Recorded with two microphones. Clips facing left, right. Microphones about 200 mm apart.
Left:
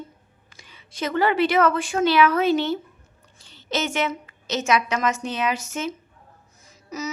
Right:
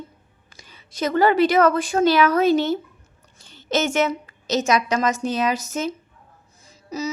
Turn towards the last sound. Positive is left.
turn(degrees=-30)  # may be behind; listen again after turning